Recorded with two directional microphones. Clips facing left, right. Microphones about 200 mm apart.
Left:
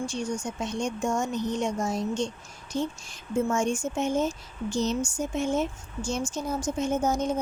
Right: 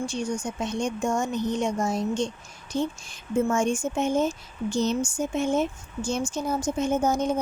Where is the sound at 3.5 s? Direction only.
60° right (ahead or behind).